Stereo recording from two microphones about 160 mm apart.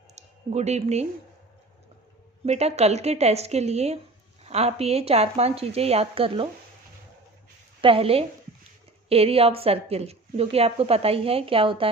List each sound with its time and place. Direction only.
0.2 s speech: 45° right (ahead or behind)
2.5 s speech: 40° right (ahead or behind)
7.8 s a woman's voice: 35° right (ahead or behind)